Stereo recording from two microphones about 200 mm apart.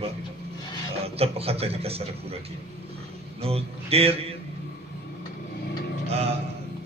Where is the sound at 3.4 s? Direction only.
30° right (ahead or behind).